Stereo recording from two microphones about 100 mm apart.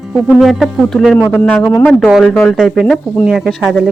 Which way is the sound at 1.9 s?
5° right (ahead or behind).